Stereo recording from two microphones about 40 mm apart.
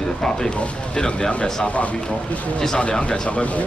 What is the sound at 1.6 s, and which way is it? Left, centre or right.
Speech, left.